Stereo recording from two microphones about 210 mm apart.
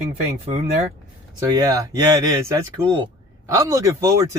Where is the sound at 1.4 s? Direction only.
15° right (ahead or behind).